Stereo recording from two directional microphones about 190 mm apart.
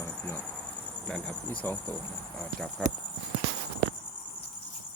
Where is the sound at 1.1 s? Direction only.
5° left (ahead or behind).